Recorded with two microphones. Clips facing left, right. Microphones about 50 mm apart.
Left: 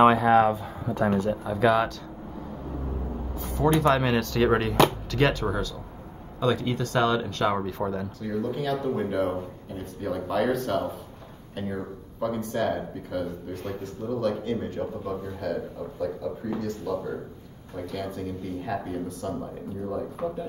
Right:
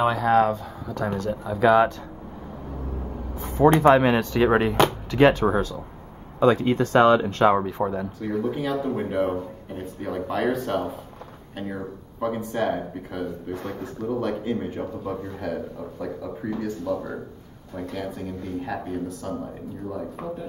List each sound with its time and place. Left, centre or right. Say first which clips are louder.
0.2 s speech: even; centre
0.8 s speech: left 3 dB; centre
1.3 s speech: right 3 dB; centre
3.3 s a man's voice: right 6 dB; right
7.5 s a man's voice: right 4 dB; centre